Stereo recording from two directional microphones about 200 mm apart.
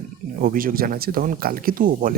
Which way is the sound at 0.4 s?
45° right (ahead or behind).